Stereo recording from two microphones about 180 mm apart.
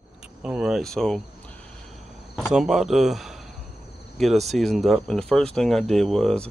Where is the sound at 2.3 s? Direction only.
Centre (ahead or behind).